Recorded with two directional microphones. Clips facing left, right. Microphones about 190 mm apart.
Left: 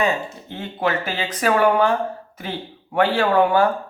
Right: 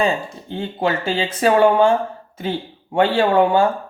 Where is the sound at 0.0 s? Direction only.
30° right (ahead or behind).